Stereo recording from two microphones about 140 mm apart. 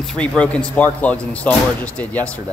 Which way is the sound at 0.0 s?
5° left (ahead or behind).